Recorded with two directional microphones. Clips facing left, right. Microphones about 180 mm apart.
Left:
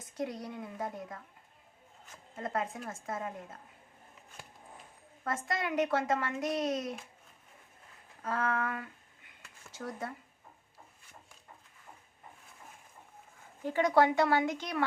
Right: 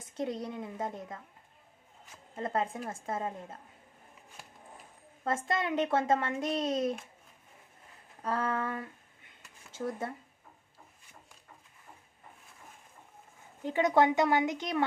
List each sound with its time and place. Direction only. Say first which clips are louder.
0.0 s speech: right 2 dB; 25° right (ahead or behind)
2.3 s speech: right 3 dB; 30° right (ahead or behind)
5.2 s speech: right 3 dB; 25° right (ahead or behind)
8.2 s speech: right 1 dB; 35° right (ahead or behind)
9.4 s a sound: right 6 dB; 25° right (ahead or behind)
13.7 s speech: right 1 dB; 20° right (ahead or behind)